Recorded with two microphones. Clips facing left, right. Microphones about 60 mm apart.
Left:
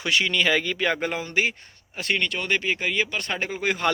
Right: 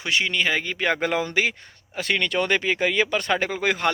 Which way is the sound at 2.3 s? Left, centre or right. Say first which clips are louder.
Right 7 dB; right.